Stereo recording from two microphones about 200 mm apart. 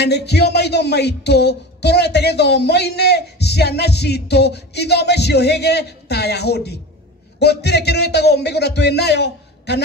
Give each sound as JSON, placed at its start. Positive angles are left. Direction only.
{"t": 0.0, "sound": "speech", "side_deg": 55}